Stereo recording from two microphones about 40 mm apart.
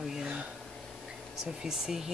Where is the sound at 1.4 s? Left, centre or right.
Centre.